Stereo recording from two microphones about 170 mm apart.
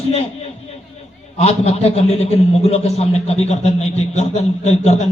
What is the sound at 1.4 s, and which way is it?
A man's voice, 40° left (ahead or behind).